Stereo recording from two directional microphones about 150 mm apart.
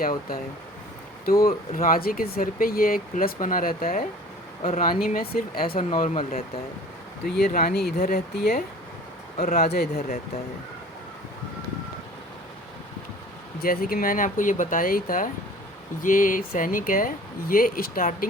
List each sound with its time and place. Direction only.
0.0 s speech: 75° left (ahead or behind)
6.1 s speech: 45° left (ahead or behind)
7.3 s speech: 85° left
9.7 s speech: 90° left
13.6 s speech: 75° left (ahead or behind)